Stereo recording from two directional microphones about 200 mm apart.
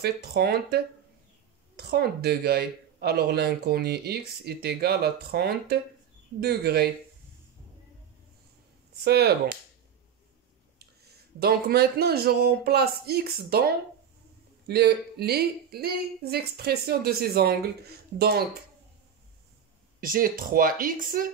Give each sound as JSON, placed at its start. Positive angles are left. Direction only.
{"t": 0.0, "sound": "speech", "side_deg": -55}
{"t": 9.0, "sound": "speech", "side_deg": -55}
{"t": 11.3, "sound": "speech", "side_deg": -50}
{"t": 20.0, "sound": "speech", "side_deg": -45}